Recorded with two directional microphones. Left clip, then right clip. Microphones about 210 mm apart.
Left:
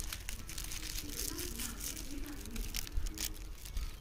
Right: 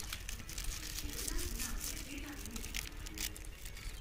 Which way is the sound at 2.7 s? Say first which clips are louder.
Even; 55° left (ahead or behind).